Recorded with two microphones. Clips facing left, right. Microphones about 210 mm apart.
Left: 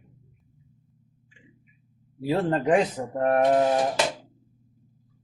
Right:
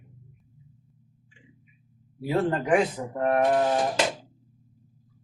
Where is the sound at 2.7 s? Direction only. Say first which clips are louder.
Left 1 dB; 40° left (ahead or behind).